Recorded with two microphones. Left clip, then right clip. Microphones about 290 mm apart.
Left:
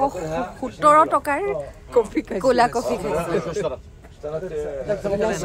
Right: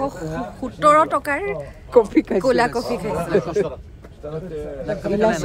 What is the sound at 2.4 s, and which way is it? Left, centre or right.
Speech, centre.